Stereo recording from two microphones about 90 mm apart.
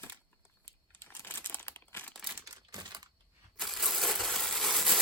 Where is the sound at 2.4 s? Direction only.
55° right (ahead or behind).